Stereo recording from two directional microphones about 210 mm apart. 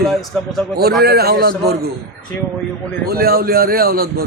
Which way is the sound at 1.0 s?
50° right (ahead or behind).